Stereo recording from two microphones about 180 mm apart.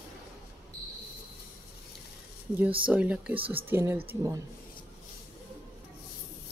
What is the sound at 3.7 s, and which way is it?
Speech, 15° right (ahead or behind).